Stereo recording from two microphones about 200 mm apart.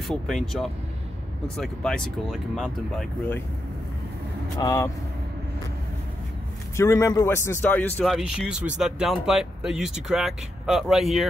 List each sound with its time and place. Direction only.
0.1 s a man's voice: centre (ahead or behind)
4.6 s speech: 15° left (ahead or behind)
6.8 s a man's voice: 15° left (ahead or behind); by 11.2 s centre (ahead or behind)